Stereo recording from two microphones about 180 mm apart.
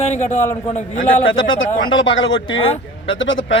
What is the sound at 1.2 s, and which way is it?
Speech, 90° left.